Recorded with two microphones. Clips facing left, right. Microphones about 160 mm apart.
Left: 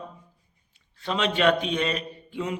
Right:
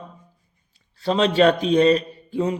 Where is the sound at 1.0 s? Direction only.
35° right (ahead or behind).